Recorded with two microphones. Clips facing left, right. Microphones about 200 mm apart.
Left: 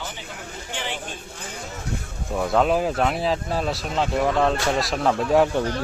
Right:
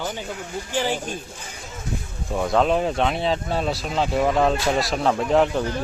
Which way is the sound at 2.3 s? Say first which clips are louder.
Even; 5° left (ahead or behind).